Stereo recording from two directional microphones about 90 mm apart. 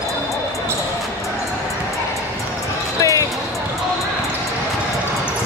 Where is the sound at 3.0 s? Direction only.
40° left (ahead or behind).